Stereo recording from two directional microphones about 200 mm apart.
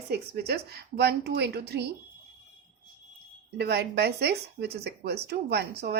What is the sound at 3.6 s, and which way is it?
Speech, 55° right (ahead or behind).